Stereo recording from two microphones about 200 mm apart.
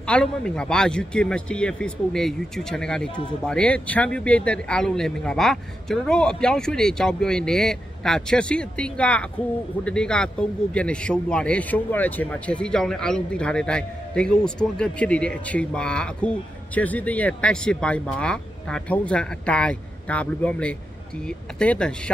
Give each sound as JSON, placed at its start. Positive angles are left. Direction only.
{"t": 0.0, "sound": "speech", "side_deg": 5}